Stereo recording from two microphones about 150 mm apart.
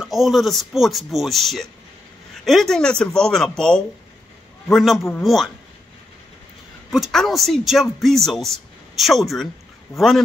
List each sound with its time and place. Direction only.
0.0 s speech: centre (ahead or behind)
6.9 s speech: centre (ahead or behind)